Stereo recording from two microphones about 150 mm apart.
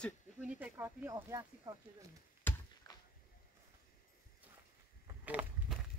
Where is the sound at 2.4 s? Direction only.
15° left (ahead or behind).